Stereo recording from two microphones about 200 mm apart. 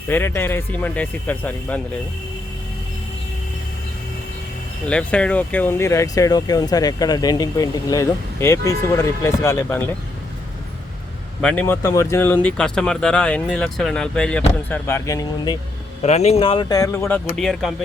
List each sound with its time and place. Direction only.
0.1 s speech: 10° left (ahead or behind)
4.9 s speech: 5° left (ahead or behind)
11.3 s speech: 5° left (ahead or behind)
16.0 s speech: 35° left (ahead or behind); by 17.7 s centre (ahead or behind)